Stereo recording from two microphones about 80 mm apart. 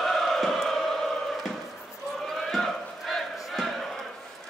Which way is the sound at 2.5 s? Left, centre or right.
Centre.